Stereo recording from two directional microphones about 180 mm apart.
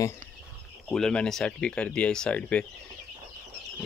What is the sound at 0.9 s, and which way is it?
Speech, 5° left (ahead or behind).